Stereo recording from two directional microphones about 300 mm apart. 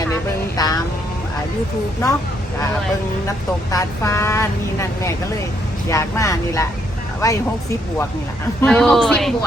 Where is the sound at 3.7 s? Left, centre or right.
Centre.